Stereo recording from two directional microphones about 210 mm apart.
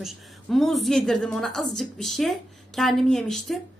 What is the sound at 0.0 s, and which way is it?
Speech, centre (ahead or behind).